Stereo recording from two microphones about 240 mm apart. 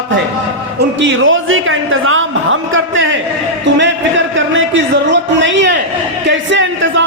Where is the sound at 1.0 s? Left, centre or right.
Right.